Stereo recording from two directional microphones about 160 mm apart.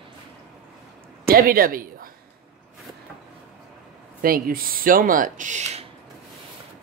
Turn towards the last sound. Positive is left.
turn(degrees=-45)  # may be behind; listen again after turning